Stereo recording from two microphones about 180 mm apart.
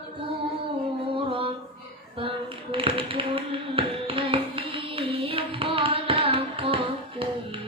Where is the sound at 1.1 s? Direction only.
30° right (ahead or behind).